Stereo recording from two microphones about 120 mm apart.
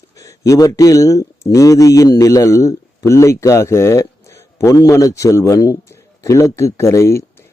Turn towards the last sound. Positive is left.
turn(degrees=25)  # may be behind; listen again after turning